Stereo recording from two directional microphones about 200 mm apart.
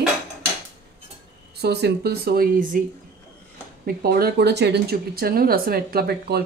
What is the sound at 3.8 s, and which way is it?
Speech, 50° right (ahead or behind).